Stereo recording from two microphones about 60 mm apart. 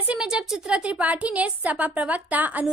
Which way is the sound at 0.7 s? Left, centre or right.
Centre.